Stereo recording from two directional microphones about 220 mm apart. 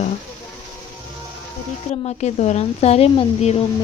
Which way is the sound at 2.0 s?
30° left (ahead or behind).